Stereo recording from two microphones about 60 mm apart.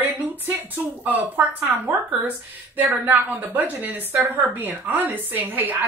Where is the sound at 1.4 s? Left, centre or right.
Right.